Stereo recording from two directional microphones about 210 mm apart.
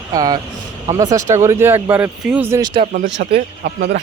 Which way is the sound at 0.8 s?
30° right (ahead or behind).